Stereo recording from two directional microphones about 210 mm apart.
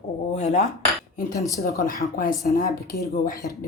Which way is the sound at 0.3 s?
35° left (ahead or behind).